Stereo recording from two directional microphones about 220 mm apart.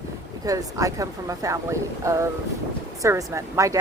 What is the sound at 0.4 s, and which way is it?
A woman's voice, 15° right (ahead or behind).